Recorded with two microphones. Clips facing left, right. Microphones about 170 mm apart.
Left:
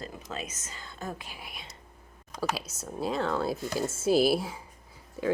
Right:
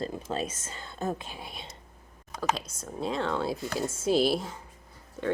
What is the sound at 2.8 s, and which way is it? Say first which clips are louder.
Speech: left 1 dB; 5° left (ahead or behind).